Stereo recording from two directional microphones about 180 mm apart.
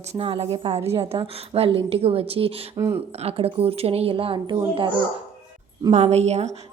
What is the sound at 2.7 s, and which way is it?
Speech, 15° right (ahead or behind).